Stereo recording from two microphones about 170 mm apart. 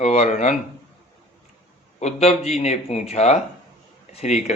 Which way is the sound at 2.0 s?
40° left (ahead or behind).